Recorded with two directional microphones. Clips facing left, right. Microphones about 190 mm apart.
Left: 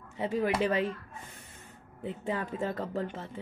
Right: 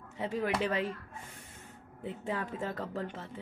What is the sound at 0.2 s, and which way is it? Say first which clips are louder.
Speech: left 3 dB; 5° left (ahead or behind).